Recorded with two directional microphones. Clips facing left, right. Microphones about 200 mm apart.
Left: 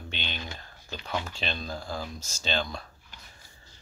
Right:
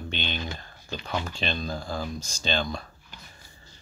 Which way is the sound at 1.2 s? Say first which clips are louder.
Right 4 dB; 5° left (ahead or behind).